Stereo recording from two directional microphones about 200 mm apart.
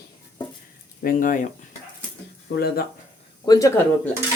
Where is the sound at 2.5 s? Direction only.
50° left (ahead or behind).